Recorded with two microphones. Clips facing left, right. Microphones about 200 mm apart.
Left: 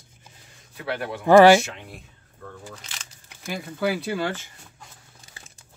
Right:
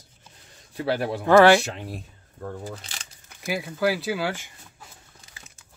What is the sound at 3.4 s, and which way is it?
Speech, 5° right (ahead or behind).